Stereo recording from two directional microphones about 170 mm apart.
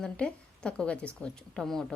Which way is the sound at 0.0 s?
5° left (ahead or behind).